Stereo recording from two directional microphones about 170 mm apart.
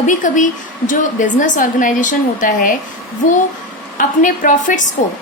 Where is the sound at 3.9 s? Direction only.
50° left (ahead or behind).